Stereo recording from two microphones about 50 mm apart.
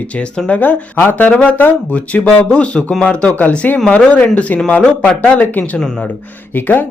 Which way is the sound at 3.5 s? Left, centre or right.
Left.